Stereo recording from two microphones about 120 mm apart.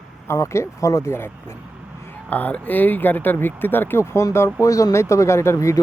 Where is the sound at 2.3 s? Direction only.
15° left (ahead or behind).